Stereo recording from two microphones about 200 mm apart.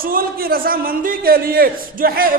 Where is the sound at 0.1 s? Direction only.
45° right (ahead or behind).